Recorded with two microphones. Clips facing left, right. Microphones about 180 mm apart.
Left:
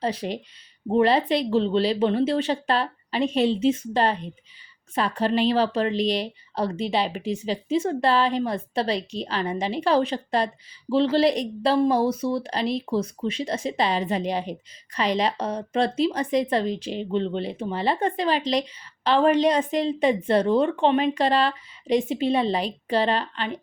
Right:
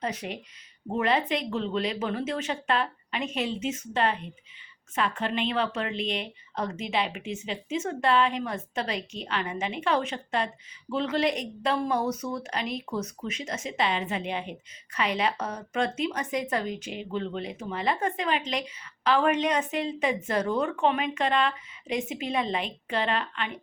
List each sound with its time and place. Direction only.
0.0 s speech: 30° left (ahead or behind)